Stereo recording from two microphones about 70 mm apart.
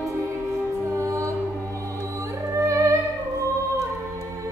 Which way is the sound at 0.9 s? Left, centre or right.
Right.